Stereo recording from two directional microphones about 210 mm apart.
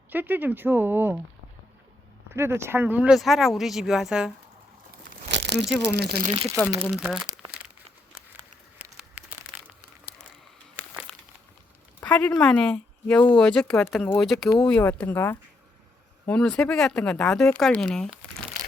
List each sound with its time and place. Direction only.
0.1 s speech: 10° right (ahead or behind)
2.3 s speech: 10° right (ahead or behind)
5.3 s crumpling: 55° right (ahead or behind)
5.7 s speech: 50° right (ahead or behind)
6.2 s speech: 30° right (ahead or behind)
7.3 s crumpling: 5° right (ahead or behind)
8.8 s a sound: 5° right (ahead or behind)
11.9 s speech: 5° left (ahead or behind)